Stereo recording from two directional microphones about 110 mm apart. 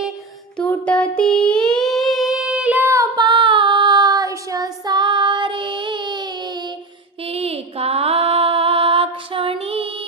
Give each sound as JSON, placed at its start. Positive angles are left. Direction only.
{"t": 0.5, "sound": "child singing", "side_deg": 10}
{"t": 3.2, "sound": "child singing", "side_deg": -45}
{"t": 7.3, "sound": "mantra", "side_deg": -65}